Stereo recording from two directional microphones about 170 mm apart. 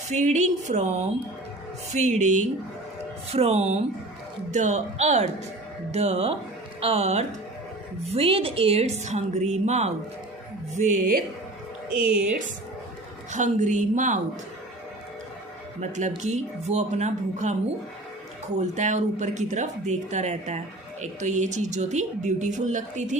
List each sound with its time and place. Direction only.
0.1 s a woman's voice: 45° right (ahead or behind)
11.9 s a woman's voice: 5° right (ahead or behind)
13.3 s a woman's voice: 45° right (ahead or behind)
15.8 s a woman's voice: 45° right (ahead or behind)